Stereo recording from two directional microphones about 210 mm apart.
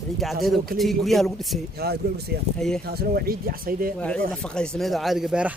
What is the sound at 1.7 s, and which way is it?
Speech, 50° right (ahead or behind).